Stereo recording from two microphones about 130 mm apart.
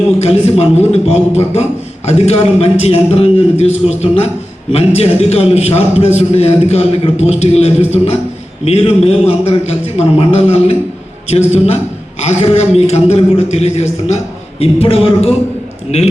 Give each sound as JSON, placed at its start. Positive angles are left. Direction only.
{"t": 0.2, "sound": "a man's voice", "side_deg": 55}